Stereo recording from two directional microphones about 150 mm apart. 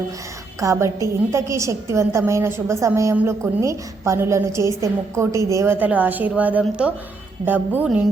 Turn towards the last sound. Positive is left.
turn(degrees=-10)  # may be behind; listen again after turning